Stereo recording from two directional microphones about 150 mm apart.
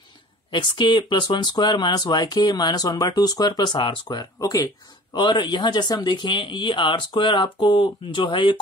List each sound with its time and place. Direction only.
0.5 s speech: 30° left (ahead or behind)